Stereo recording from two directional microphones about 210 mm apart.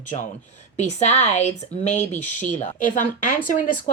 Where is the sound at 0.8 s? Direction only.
35° left (ahead or behind).